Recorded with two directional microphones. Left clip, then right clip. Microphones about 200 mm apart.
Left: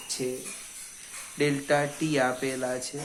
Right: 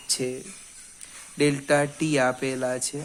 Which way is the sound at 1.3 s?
45° right (ahead or behind).